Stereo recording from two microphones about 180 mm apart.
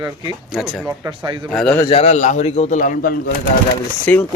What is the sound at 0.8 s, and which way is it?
Speech, 20° right (ahead or behind).